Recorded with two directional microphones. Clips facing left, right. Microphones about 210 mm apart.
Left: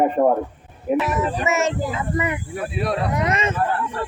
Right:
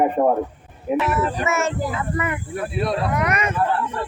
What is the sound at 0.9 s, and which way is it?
Speech, 15° left (ahead or behind).